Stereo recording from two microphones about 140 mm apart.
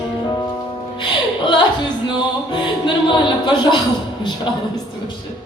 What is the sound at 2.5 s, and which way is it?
Music, 35° left (ahead or behind).